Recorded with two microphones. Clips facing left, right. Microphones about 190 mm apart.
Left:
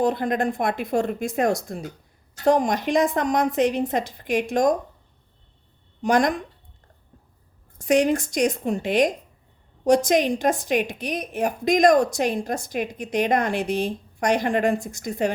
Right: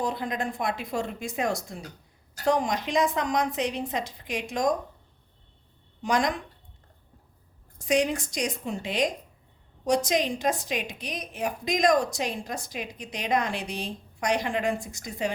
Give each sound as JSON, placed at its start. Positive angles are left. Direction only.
{"t": 0.0, "sound": "a woman's voice", "side_deg": 55}
{"t": 6.0, "sound": "a woman's voice", "side_deg": 50}
{"t": 7.9, "sound": "a woman's voice", "side_deg": 50}